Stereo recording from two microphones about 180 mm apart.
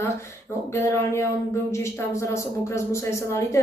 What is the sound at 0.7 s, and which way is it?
Speech, 15° left (ahead or behind).